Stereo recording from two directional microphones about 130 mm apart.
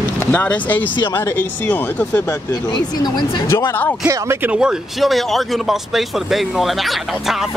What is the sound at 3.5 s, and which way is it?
Speech, 20° left (ahead or behind).